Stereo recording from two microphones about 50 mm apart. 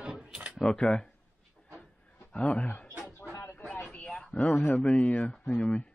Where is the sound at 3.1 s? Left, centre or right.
Left.